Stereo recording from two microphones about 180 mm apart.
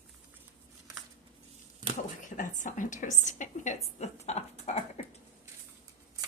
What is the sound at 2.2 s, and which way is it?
A woman's voice, 45° left (ahead or behind).